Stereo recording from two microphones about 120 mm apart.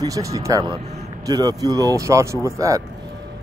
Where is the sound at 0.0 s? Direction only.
30° right (ahead or behind).